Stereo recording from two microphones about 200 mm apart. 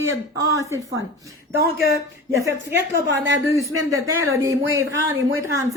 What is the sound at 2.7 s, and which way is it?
Speech, 60° right (ahead or behind).